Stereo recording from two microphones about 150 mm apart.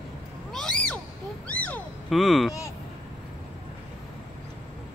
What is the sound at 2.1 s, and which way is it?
Speech, centre (ahead or behind).